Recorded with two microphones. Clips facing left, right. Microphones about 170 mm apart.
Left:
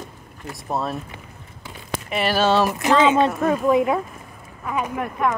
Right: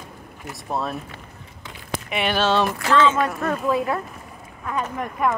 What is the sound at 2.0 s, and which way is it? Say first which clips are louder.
Speech: left 2 dB; centre (ahead or behind).